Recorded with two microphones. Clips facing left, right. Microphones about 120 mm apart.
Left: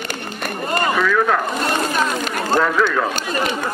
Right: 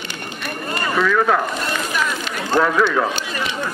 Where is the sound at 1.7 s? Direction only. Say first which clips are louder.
Left 4 dB; 35° left (ahead or behind).